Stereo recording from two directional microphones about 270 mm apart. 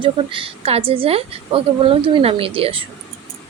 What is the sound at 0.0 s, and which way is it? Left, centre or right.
Speech, centre.